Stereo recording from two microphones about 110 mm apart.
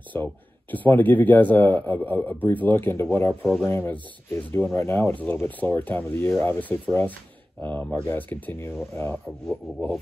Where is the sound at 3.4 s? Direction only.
5° left (ahead or behind).